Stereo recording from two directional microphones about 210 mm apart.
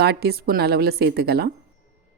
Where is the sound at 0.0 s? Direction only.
50° right (ahead or behind).